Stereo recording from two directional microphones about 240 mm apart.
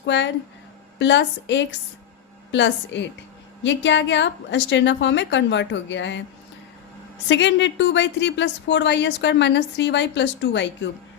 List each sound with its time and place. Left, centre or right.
0.0 s speech: left
7.3 s speech: left